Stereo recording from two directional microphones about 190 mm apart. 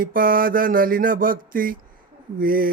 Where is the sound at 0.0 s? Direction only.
50° right (ahead or behind).